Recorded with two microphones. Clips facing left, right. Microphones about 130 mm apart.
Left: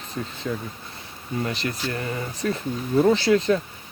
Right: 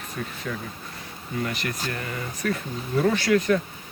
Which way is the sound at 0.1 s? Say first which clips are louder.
Left 3 dB; 25° left (ahead or behind).